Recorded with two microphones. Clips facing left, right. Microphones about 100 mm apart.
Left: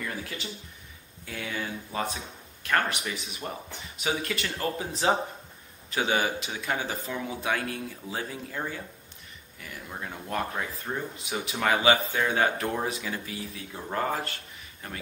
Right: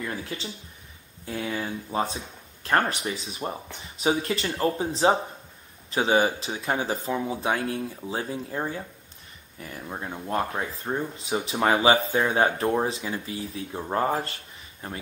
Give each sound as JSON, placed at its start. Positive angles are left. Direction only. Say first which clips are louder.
{"t": 0.3, "sound": "speech", "louder": "right 3 dB", "side_deg": -30}